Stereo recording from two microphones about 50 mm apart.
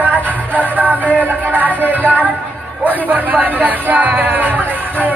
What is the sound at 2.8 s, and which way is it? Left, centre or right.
Speech, left.